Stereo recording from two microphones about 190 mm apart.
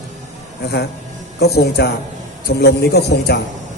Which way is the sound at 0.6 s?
55° left (ahead or behind).